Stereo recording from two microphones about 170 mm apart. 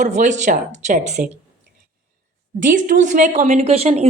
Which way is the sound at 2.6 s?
50° right (ahead or behind).